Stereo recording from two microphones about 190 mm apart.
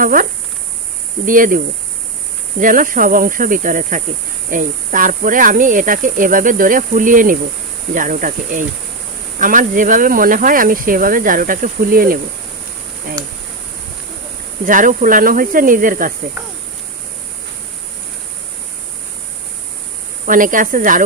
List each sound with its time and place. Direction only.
0.0 s speech: 45° right (ahead or behind)
14.6 s speech: 45° right (ahead or behind)
20.2 s speech: 45° right (ahead or behind)